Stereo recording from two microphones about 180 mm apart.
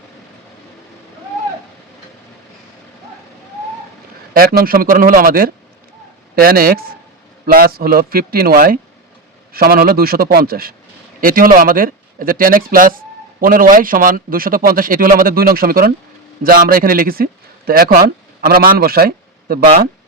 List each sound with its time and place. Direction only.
4.4 s a man's voice: 55° right (ahead or behind)